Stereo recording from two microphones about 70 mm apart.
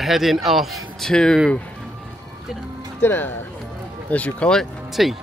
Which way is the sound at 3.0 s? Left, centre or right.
Left.